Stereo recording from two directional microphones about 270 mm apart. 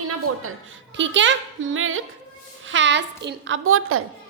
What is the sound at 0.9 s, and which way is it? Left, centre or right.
A woman's voice, right.